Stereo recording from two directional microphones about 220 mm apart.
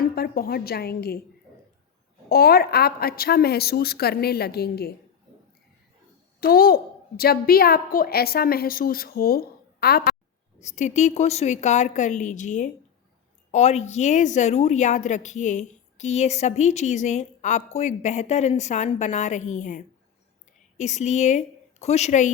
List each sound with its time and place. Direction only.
0.0 s a woman's voice: 40° left (ahead or behind)
2.3 s a woman's voice: 45° left (ahead or behind)
6.4 s a woman's voice: 40° left (ahead or behind)
10.6 s a woman's voice: 30° left (ahead or behind)